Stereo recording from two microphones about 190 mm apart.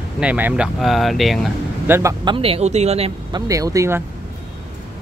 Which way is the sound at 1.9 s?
15° right (ahead or behind).